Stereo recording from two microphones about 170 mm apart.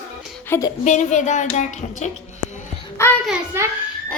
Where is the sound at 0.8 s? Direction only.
45° left (ahead or behind).